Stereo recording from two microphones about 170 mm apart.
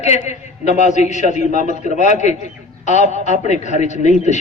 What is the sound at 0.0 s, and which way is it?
A man's voice, 40° left (ahead or behind).